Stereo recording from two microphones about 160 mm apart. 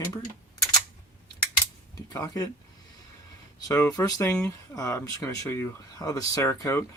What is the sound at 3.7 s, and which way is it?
Speech, 20° left (ahead or behind).